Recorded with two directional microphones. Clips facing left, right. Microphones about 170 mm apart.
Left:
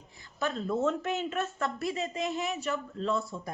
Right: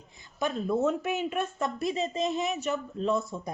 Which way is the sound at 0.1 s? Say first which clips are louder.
Right 2 dB; 15° right (ahead or behind).